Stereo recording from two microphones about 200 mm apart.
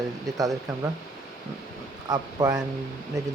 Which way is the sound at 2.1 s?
20° right (ahead or behind).